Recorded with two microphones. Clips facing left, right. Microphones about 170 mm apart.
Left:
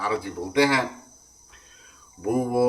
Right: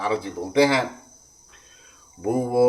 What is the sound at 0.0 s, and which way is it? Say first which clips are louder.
Speech: right 2 dB; 25° right (ahead or behind).